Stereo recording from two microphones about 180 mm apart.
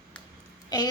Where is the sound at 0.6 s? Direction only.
20° left (ahead or behind).